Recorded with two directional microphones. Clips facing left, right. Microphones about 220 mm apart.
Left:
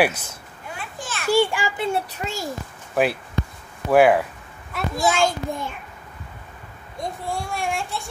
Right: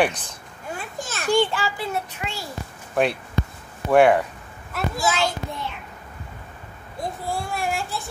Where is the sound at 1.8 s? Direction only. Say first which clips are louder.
Left 4 dB; 35° left (ahead or behind).